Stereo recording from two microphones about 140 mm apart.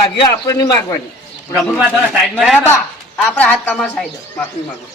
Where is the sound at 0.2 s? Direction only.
25° left (ahead or behind).